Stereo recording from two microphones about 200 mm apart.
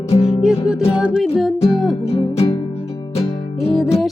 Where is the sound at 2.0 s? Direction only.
30° left (ahead or behind).